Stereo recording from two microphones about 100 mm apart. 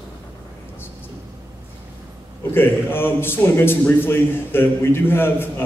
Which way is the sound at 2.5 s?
20° left (ahead or behind).